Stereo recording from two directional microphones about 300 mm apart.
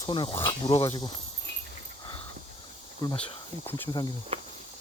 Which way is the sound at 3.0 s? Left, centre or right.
Centre.